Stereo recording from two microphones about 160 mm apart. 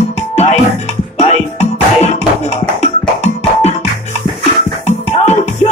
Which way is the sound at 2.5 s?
45° left (ahead or behind).